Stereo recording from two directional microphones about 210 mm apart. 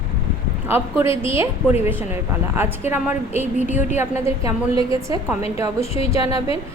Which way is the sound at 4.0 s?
15° right (ahead or behind).